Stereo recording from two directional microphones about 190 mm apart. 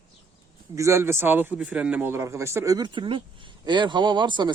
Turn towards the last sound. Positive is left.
turn(degrees=-25)  # may be behind; listen again after turning